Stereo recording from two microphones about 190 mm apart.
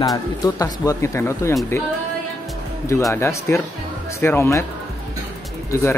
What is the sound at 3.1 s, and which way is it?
Speech, 15° left (ahead or behind).